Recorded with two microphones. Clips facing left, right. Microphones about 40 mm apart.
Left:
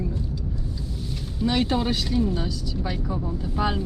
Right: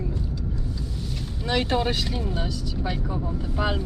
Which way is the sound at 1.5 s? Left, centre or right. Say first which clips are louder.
Even; right.